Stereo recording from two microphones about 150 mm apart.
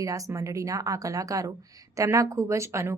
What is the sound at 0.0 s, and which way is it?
A woman's voice, 20° right (ahead or behind).